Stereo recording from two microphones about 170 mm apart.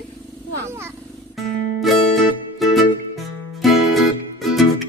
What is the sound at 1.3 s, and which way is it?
Music, centre (ahead or behind).